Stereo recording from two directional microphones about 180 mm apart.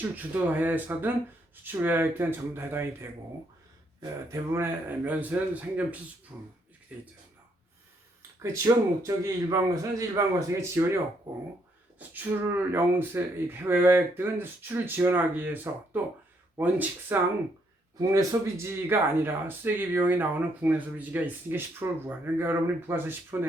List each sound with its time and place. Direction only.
0.0 s speech: 10° right (ahead or behind)
8.4 s speech: 20° right (ahead or behind)
11.9 s speech: 10° right (ahead or behind)